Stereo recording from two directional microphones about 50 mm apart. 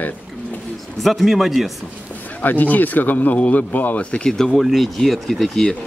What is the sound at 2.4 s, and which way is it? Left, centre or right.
Speech, left.